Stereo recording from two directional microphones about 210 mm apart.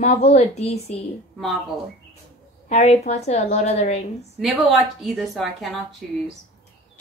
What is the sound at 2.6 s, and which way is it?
A woman's voice, 30° left (ahead or behind).